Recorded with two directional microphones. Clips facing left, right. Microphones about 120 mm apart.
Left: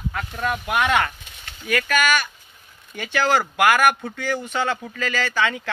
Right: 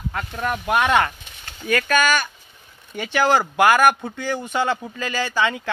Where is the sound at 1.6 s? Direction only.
30° right (ahead or behind).